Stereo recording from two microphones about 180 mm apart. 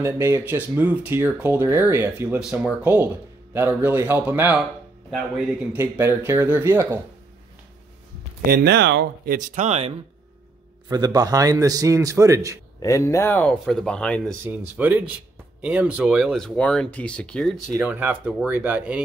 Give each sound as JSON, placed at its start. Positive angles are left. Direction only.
{"t": 0.0, "sound": "speech", "side_deg": -15}
{"t": 5.7, "sound": "speech", "side_deg": -10}
{"t": 8.4, "sound": "speech", "side_deg": -60}
{"t": 10.9, "sound": "a man's voice", "side_deg": -20}
{"t": 12.8, "sound": "speech", "side_deg": 15}
{"t": 14.4, "sound": "speech", "side_deg": -10}